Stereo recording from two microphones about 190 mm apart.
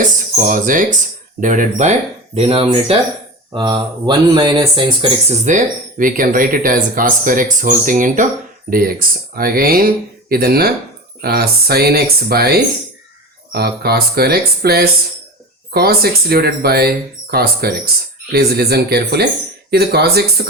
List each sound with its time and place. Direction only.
0.0 s speech: 45° right (ahead or behind)
2.3 s speech: 30° right (ahead or behind)
5.5 s speech: 45° right (ahead or behind)